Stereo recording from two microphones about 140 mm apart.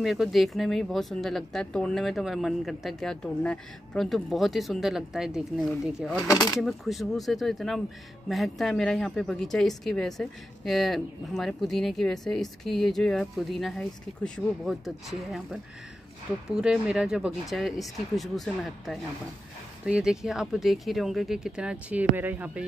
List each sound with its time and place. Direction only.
0.0 s a woman's voice: centre (ahead or behind)
6.2 s speech: 25° left (ahead or behind)
6.6 s a woman's voice: centre (ahead or behind)